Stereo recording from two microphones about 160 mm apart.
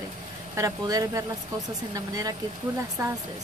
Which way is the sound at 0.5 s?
20° right (ahead or behind).